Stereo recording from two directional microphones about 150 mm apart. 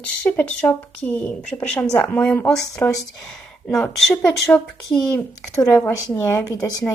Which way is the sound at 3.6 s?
Centre (ahead or behind).